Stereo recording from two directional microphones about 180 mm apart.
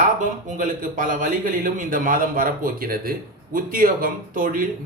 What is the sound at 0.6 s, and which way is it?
Speech, 45° right (ahead or behind).